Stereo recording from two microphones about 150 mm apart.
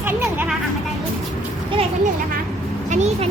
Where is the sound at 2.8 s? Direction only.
50° right (ahead or behind).